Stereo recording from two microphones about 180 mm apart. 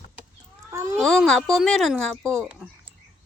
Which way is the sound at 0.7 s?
15° right (ahead or behind).